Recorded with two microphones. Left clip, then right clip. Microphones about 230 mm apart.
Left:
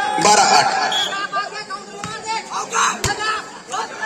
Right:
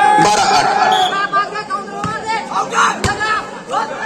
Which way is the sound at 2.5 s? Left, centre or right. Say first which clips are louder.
Right 5 dB; left.